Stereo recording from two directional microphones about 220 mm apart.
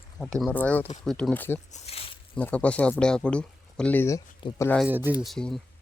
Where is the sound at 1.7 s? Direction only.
25° left (ahead or behind).